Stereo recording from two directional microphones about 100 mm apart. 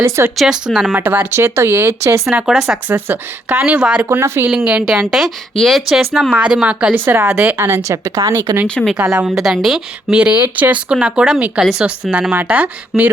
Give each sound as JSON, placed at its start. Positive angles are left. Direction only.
{"t": 0.3, "sound": "speech", "side_deg": -5}
{"t": 0.9, "sound": "speech", "side_deg": -20}
{"t": 2.5, "sound": "speech", "side_deg": -5}
{"t": 2.9, "sound": "speech", "side_deg": -20}
{"t": 4.2, "sound": "speech", "side_deg": -25}
{"t": 4.5, "sound": "speech", "side_deg": -10}
{"t": 8.7, "sound": "speech", "side_deg": 5}
{"t": 12.3, "sound": "speech", "side_deg": -15}
{"t": 12.9, "sound": "speech", "side_deg": 0}